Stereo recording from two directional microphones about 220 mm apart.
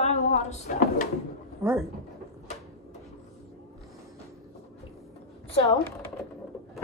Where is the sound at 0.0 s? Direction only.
30° left (ahead or behind).